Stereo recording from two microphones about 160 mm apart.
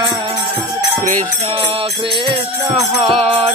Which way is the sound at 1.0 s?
45° right (ahead or behind).